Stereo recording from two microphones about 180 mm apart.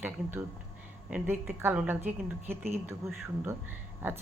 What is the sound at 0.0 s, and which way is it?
Speech, 10° right (ahead or behind).